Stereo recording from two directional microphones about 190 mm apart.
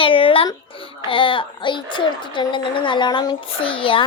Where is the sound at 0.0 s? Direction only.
30° left (ahead or behind).